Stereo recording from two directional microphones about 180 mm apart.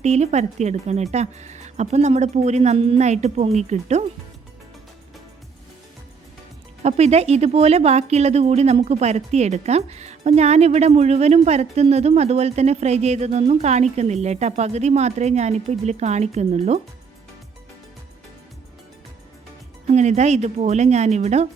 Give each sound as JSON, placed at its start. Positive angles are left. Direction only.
{"t": 0.0, "sound": "speech", "side_deg": -40}
{"t": 6.8, "sound": "speech", "side_deg": -35}
{"t": 19.9, "sound": "speech", "side_deg": -40}